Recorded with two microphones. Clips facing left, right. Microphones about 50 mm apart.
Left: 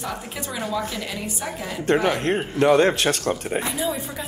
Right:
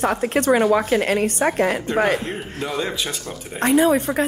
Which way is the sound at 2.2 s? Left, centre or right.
Left.